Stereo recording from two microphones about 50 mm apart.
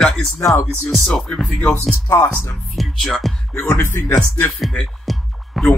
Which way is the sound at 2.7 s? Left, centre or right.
Centre.